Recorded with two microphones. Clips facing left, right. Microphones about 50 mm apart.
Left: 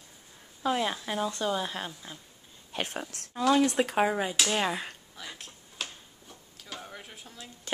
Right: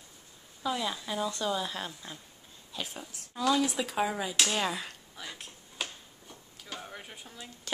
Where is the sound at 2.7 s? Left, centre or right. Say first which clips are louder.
Left 6 dB; left.